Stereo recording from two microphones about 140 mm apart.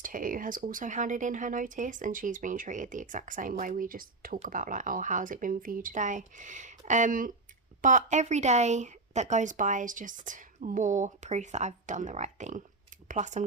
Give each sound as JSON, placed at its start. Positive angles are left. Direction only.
{"t": 0.0, "sound": "speech", "side_deg": -80}
{"t": 4.4, "sound": "speech", "side_deg": -75}
{"t": 7.8, "sound": "a woman's voice", "side_deg": -65}